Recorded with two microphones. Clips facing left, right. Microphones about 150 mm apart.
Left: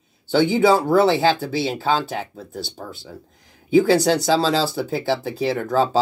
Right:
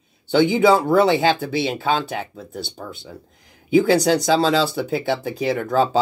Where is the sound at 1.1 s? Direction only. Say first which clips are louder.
Even; 20° right (ahead or behind).